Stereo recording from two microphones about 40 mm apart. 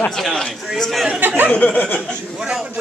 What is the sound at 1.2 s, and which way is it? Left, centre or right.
Speech, right.